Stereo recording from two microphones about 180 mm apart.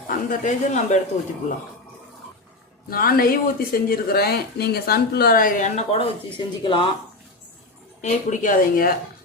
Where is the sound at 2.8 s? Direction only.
55° left (ahead or behind).